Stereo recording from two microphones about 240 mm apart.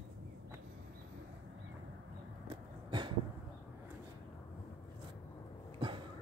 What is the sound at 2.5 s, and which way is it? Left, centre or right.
Vehicle, centre.